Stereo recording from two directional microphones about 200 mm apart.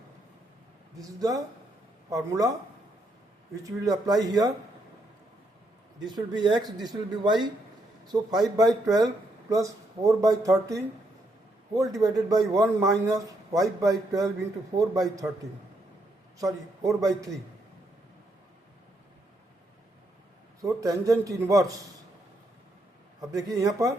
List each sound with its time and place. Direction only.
0.9 s speech: 15° right (ahead or behind)
3.5 s speech: 15° right (ahead or behind)
6.1 s speech: 20° right (ahead or behind)
16.4 s speech: 15° right (ahead or behind)
20.6 s speech: 15° right (ahead or behind)
23.6 s speech: 15° right (ahead or behind)